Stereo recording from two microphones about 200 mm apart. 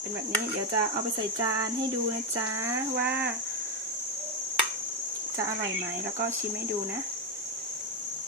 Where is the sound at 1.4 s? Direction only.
20° right (ahead or behind).